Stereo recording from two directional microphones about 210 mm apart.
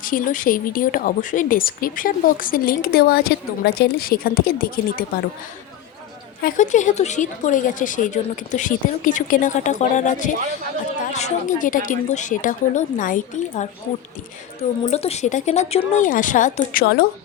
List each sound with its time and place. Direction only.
0.0 s speech: 40° left (ahead or behind)
6.4 s speech: 35° left (ahead or behind)
14.8 s speech: 30° left (ahead or behind); by 17.1 s 45° left (ahead or behind)